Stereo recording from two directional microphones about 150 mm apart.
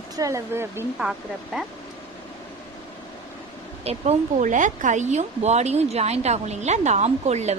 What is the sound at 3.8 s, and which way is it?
Speech, 50° right (ahead or behind).